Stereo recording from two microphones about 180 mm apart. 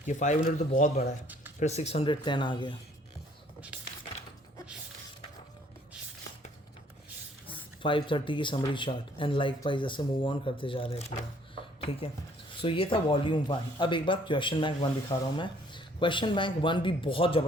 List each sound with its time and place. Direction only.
0.0 s speech: 45° left (ahead or behind); by 2.7 s 25° left (ahead or behind)
7.4 s speech: 30° left (ahead or behind)